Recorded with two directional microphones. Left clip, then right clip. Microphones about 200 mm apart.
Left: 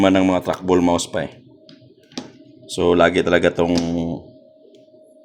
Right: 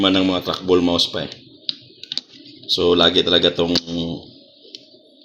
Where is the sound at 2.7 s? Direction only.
40° left (ahead or behind).